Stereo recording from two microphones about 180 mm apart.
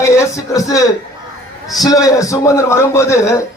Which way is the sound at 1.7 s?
20° left (ahead or behind).